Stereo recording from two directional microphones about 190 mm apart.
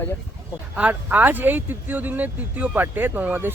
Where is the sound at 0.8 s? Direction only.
10° right (ahead or behind).